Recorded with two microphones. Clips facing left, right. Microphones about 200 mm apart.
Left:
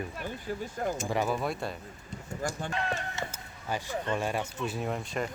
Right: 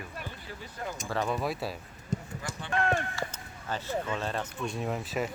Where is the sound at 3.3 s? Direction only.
10° left (ahead or behind).